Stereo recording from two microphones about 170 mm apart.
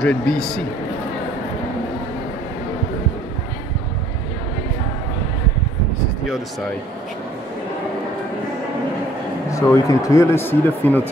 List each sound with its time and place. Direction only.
0.0 s a man's voice: 5° left (ahead or behind)
9.5 s speech: 20° left (ahead or behind)